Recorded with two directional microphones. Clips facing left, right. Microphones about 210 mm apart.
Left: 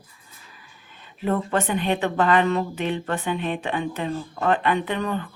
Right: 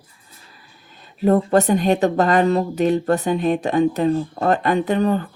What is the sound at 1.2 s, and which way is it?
Speech, 40° right (ahead or behind).